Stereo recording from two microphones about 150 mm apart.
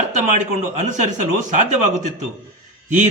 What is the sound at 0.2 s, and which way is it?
A man's voice, 55° right (ahead or behind).